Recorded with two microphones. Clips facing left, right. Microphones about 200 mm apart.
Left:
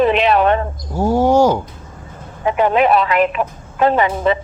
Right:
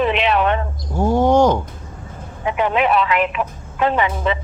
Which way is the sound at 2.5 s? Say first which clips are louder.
Left 4 dB; 40° left (ahead or behind).